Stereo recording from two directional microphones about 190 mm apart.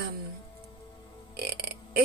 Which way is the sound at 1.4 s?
55° right (ahead or behind).